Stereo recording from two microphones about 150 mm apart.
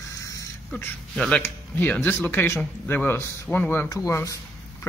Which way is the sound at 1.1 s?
5° left (ahead or behind).